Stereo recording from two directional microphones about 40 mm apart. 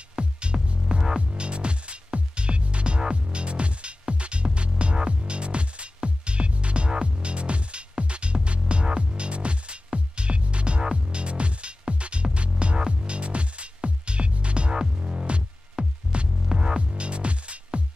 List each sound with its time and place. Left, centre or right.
0.2 s music: right